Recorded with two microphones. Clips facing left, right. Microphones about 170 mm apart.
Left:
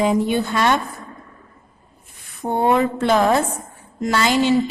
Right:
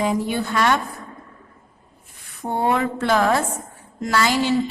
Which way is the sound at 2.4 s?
20° left (ahead or behind).